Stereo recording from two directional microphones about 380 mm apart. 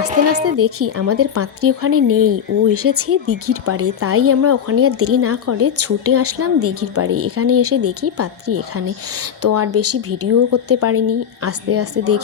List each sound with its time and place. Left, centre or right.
0.1 s speech: centre
0.6 s a woman's voice: right
2.0 s speech: right
2.7 s a woman's voice: right